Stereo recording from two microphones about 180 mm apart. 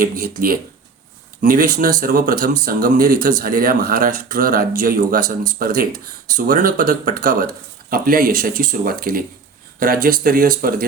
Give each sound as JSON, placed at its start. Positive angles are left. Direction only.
{"t": 0.0, "sound": "speech", "side_deg": -50}